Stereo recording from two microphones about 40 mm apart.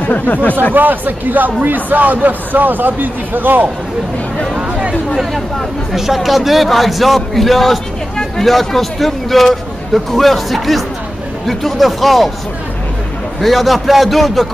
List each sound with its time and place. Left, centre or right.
0.0 s speech: left
0.7 s a man's voice: right
4.6 s a sound: right
5.9 s a man's voice: centre
13.4 s a man's voice: centre